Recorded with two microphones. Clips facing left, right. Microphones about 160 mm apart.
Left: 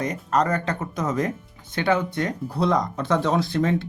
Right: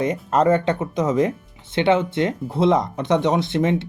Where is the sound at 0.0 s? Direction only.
25° right (ahead or behind).